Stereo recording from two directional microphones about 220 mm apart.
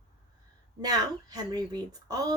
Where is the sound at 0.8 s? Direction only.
15° right (ahead or behind).